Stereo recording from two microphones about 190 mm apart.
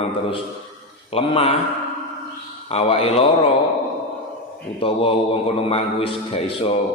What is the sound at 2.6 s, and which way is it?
Speech, 30° left (ahead or behind).